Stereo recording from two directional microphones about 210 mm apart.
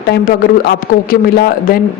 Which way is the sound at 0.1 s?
45° left (ahead or behind).